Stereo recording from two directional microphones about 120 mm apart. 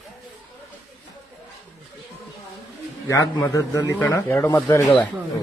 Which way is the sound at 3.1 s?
25° left (ahead or behind).